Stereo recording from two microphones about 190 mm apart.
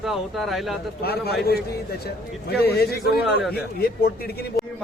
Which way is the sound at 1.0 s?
55° left (ahead or behind).